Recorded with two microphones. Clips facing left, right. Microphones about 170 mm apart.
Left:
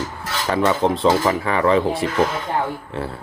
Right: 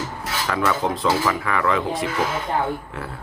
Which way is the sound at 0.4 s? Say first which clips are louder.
Left 5 dB; 30° left (ahead or behind).